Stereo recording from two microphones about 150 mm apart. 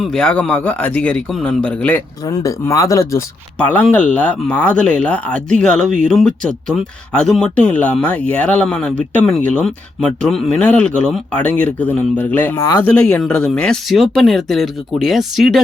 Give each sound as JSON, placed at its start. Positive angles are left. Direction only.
{"t": 0.0, "sound": "speech", "side_deg": 5}
{"t": 2.2, "sound": "speech", "side_deg": 20}
{"t": 3.6, "sound": "speech", "side_deg": 10}